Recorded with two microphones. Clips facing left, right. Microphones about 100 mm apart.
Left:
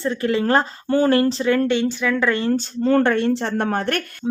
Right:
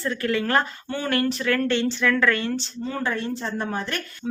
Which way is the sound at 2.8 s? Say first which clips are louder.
Left 12 dB; 65° left (ahead or behind).